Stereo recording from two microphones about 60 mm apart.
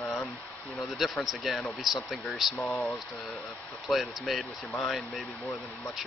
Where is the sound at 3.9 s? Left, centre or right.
Centre.